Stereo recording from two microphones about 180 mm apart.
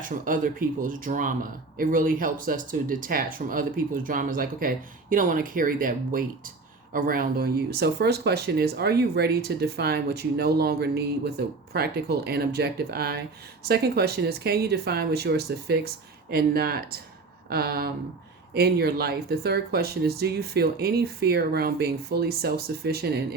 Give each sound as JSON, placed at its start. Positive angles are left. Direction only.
{"t": 0.0, "sound": "speech", "side_deg": -50}